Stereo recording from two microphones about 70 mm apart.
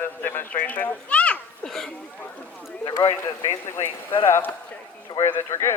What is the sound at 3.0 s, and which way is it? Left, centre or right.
Speech, left.